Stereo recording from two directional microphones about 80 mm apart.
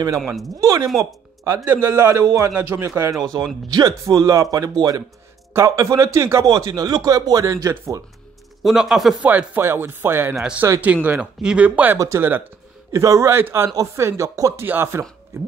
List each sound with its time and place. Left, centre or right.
0.6 s a man's voice: right
3.2 s a man's voice: right
6.4 s speech: right
8.6 s speech: centre
9.2 s speech: centre
10.8 s speech: centre
12.9 s a man's voice: right
14.7 s a man's voice: right